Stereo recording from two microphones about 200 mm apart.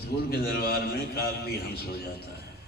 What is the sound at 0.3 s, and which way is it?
A man's voice, 50° left (ahead or behind).